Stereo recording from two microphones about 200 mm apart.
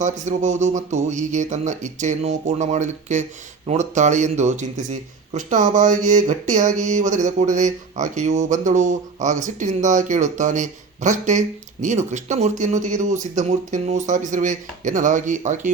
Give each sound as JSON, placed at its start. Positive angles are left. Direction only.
{"t": 0.0, "sound": "speech", "side_deg": -35}